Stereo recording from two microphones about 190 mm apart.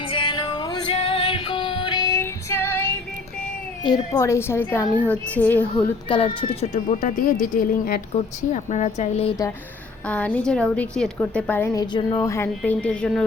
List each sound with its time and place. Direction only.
0.0 s music: 25° left (ahead or behind)
3.8 s a woman's voice: 20° left (ahead or behind)
5.7 s a woman's voice: 25° left (ahead or behind)
10.1 s a woman's voice: 10° left (ahead or behind)